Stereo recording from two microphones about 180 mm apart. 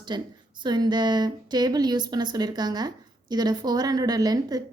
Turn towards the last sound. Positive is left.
turn(degrees=-20)  # may be behind; listen again after turning